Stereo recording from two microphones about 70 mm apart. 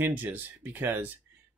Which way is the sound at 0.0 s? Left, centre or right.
Right.